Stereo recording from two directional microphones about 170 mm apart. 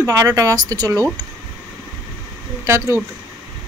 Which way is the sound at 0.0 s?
20° right (ahead or behind).